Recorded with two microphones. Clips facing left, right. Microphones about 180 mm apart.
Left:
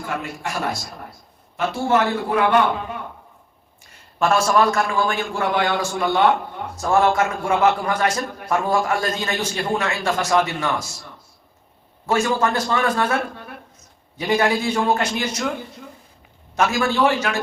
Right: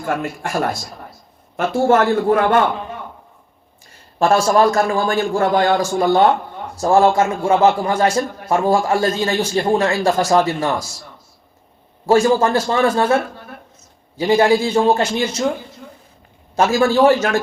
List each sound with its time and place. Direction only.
0.2 s a man's voice: 55° right (ahead or behind)
4.2 s a man's voice: 35° right (ahead or behind)
12.0 s a man's voice: 35° right (ahead or behind)
14.2 s a man's voice: 30° right (ahead or behind)
16.6 s a man's voice: 35° right (ahead or behind)